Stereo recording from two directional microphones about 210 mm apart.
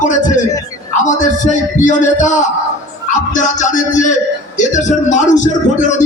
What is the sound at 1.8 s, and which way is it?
Speech, 35° left (ahead or behind).